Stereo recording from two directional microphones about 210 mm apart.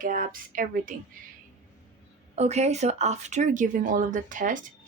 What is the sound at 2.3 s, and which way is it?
Speech, 30° right (ahead or behind).